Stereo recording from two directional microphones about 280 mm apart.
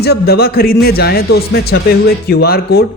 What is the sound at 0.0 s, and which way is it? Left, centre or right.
A man's voice, left.